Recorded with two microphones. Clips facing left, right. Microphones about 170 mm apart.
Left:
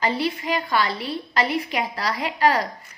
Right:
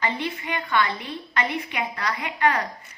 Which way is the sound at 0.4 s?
35° left (ahead or behind).